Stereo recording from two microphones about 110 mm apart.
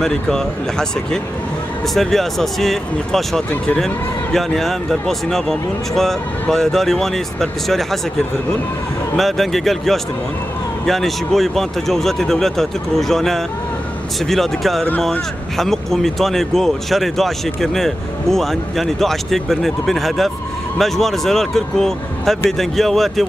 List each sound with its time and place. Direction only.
0.0 s speech: 5° left (ahead or behind)